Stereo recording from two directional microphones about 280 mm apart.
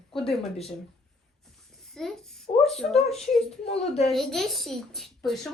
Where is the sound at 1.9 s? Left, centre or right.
Centre.